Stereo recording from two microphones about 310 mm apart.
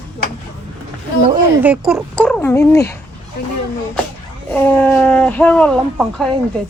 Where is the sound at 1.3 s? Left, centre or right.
Centre.